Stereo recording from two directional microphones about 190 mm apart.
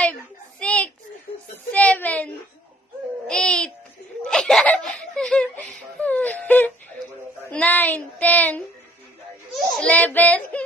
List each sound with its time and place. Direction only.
0.6 s a sound: 5° left (ahead or behind)
1.7 s whimper: 5° left (ahead or behind)
3.2 s music: 5° left (ahead or behind)
4.2 s laughter: 5° left (ahead or behind)
6.0 s wail: 10° left (ahead or behind)
7.5 s a sound: 10° left (ahead or behind)